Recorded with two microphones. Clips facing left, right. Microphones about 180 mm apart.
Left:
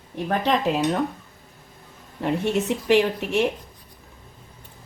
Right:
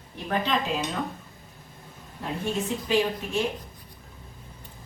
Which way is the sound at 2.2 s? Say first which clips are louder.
Left 7 dB; 75° left (ahead or behind).